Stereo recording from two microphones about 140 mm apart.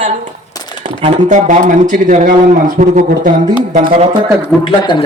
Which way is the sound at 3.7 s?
50° right (ahead or behind).